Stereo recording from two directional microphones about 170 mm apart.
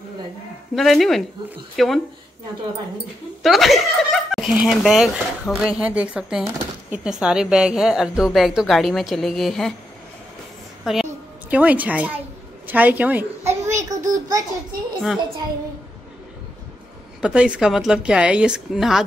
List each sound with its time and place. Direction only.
0.7 s speech: centre (ahead or behind)
3.4 s speech: centre (ahead or behind)
10.8 s a sound: centre (ahead or behind)
11.5 s a woman's voice: 10° right (ahead or behind)
17.2 s speech: 5° right (ahead or behind)